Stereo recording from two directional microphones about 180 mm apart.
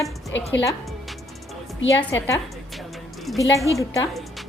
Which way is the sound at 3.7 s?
15° left (ahead or behind).